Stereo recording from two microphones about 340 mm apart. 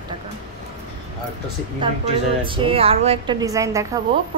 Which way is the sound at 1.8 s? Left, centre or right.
Centre.